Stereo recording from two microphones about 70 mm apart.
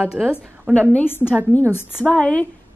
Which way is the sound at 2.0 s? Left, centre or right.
Centre.